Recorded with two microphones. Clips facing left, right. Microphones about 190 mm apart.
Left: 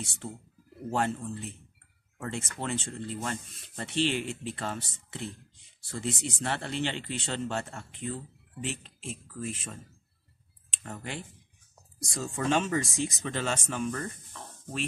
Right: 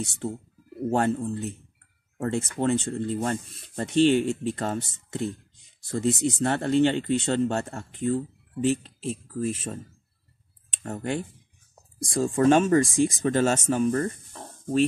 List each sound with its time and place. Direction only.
0.8 s speech: 40° right (ahead or behind)